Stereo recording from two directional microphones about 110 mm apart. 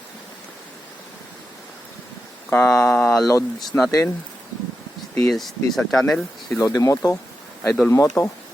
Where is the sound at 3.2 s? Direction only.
30° left (ahead or behind).